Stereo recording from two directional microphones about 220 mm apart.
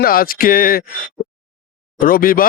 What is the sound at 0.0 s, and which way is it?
Speech, 40° left (ahead or behind).